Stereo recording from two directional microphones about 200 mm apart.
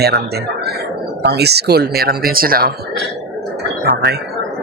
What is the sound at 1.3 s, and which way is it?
Speech, 55° right (ahead or behind).